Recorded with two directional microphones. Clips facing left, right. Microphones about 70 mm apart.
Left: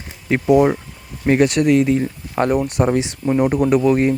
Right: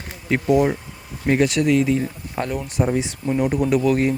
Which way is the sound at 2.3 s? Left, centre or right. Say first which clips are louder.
Left 8 dB; left.